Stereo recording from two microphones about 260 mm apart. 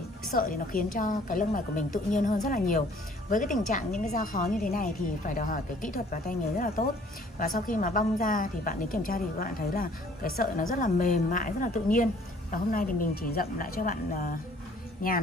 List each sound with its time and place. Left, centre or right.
0.3 s a woman's voice: left